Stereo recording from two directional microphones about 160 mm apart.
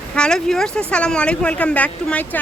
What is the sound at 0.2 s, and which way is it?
Speech, 5° left (ahead or behind).